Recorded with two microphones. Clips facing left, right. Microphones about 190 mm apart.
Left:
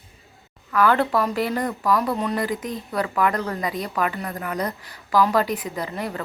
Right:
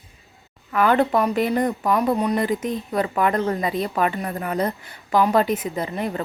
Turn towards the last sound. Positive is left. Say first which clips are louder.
# right 3 dB
turn(degrees=-20)  # may be behind; listen again after turning